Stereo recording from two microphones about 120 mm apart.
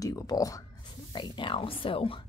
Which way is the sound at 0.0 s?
30° left (ahead or behind).